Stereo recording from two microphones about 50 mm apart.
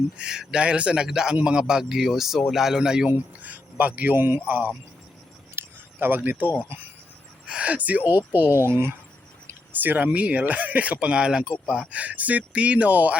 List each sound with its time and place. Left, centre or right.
0.2 s speech: centre
3.1 s speech: right
4.1 s speech: right
4.4 s speech: right
5.5 s a sound: right
7.4 s speech: right
8.6 s speech: right
9.8 s speech: right
10.1 s speech: right
11.9 s speech: right